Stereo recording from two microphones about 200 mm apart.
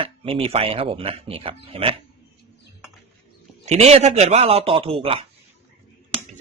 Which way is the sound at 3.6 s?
35° right (ahead or behind).